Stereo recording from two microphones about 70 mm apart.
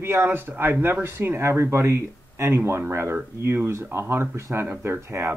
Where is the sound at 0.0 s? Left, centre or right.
Right.